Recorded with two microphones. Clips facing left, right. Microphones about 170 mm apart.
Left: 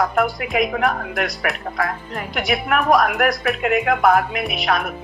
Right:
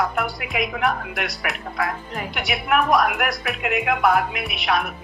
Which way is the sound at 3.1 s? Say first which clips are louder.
Left 5 dB; 40° left (ahead or behind).